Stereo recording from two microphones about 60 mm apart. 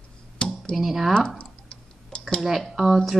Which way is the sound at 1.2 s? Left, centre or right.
Centre.